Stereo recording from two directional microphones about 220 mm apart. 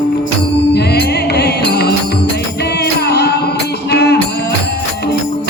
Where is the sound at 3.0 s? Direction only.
45° left (ahead or behind).